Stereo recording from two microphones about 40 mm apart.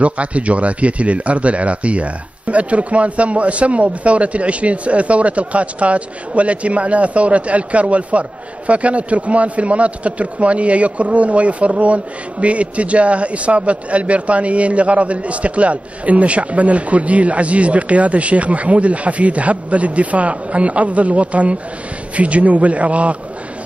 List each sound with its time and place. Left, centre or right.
0.0 s speech: right